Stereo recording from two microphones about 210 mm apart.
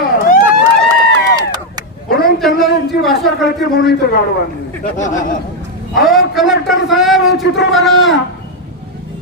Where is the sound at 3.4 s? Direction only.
50° left (ahead or behind).